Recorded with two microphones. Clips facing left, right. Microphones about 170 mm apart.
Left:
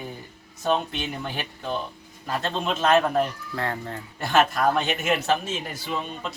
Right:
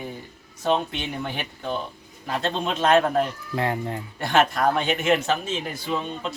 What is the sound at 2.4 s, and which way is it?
Speech, 5° left (ahead or behind).